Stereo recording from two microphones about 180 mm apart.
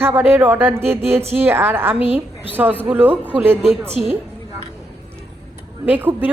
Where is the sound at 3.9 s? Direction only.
35° right (ahead or behind).